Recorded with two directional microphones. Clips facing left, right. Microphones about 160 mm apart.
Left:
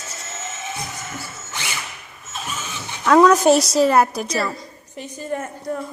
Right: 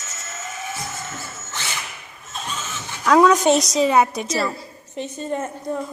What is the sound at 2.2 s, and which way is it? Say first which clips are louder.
Vehicle: even; 5° left (ahead or behind).